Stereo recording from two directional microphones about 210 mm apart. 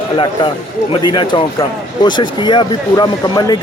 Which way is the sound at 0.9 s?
20° left (ahead or behind).